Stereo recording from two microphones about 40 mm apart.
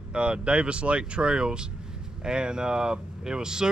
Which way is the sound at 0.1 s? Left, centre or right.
Right.